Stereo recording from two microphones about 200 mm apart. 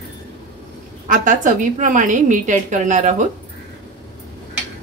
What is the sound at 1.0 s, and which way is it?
A woman's voice, 40° right (ahead or behind).